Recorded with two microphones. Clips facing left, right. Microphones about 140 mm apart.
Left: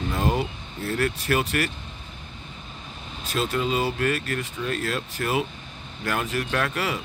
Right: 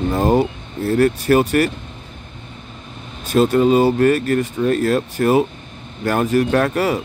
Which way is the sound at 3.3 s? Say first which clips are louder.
Right 12 dB; 45° right (ahead or behind).